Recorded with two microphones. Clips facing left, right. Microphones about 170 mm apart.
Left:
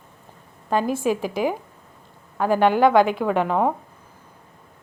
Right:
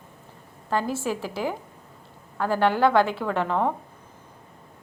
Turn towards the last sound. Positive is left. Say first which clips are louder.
# left 4 dB
turn(degrees=15)  # may be behind; listen again after turning